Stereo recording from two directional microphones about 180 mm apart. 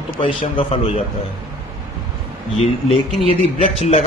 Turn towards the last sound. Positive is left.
turn(degrees=35)  # may be behind; listen again after turning